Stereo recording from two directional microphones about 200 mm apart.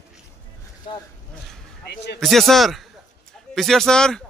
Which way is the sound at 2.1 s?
Centre (ahead or behind).